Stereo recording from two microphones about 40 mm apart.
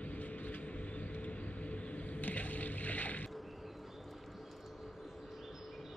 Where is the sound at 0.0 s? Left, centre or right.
Left.